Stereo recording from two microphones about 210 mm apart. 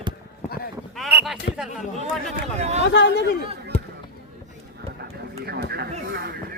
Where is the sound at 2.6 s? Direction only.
30° right (ahead or behind).